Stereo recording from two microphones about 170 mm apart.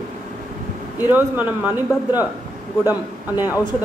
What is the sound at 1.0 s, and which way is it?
Speech, 10° right (ahead or behind).